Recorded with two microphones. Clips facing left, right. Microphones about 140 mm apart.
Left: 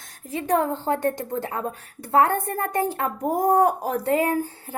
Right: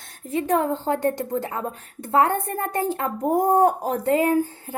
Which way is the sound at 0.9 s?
20° right (ahead or behind).